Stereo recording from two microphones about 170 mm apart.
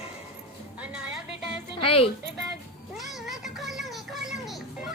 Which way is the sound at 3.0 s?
Centre (ahead or behind).